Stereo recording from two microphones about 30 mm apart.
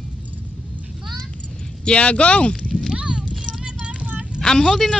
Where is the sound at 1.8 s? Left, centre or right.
Left.